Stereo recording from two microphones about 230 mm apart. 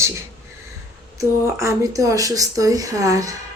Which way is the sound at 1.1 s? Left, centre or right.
Centre.